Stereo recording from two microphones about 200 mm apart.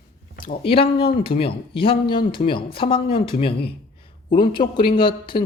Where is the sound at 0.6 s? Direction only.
25° left (ahead or behind).